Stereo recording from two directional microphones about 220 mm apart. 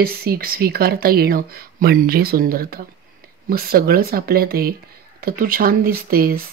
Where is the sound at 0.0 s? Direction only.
45° right (ahead or behind).